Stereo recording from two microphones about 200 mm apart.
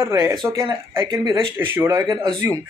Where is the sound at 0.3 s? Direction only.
15° right (ahead or behind).